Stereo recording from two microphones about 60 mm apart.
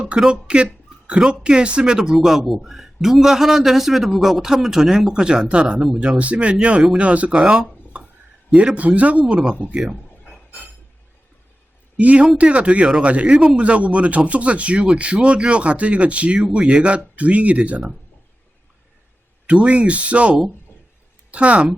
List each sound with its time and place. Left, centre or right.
0.2 s a man's voice: centre
5.7 s a man's voice: centre
6.0 s speech: right
11.9 s speech: right
19.5 s speech: right